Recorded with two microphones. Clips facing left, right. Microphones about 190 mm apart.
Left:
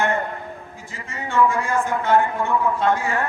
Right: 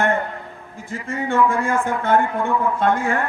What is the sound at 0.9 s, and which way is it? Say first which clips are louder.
A man's voice: right 1 dB; 55° right (ahead or behind).